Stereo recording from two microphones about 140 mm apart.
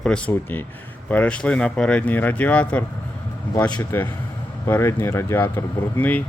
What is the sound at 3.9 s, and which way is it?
Speech, 15° left (ahead or behind).